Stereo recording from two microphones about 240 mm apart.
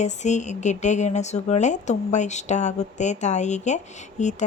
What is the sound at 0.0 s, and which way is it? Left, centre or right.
Speech, left.